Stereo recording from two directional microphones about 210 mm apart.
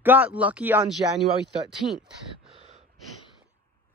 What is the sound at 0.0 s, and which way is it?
Speech, 10° right (ahead or behind).